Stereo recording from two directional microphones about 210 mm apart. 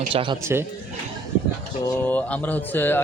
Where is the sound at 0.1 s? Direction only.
25° right (ahead or behind).